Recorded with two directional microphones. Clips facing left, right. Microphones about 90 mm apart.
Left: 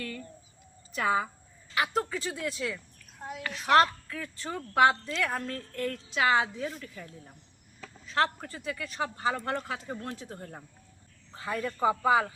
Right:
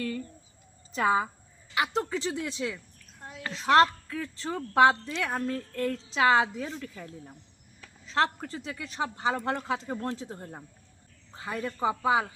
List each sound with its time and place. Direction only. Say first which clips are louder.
0.9 s a man's voice: right 2 dB; 25° right (ahead or behind)
8.0 s a man's voice: right 1 dB; 25° right (ahead or behind)